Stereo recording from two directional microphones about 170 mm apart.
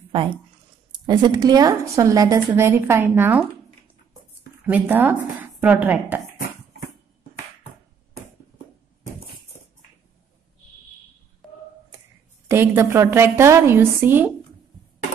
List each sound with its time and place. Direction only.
0.9 s a woman's voice: 25° right (ahead or behind); by 6.2 s 10° right (ahead or behind)
12.4 s a woman's voice: 15° right (ahead or behind)